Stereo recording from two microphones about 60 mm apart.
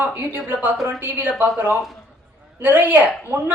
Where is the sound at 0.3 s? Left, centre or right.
Right.